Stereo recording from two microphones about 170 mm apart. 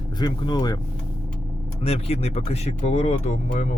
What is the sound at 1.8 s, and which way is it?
Speech, 35° left (ahead or behind).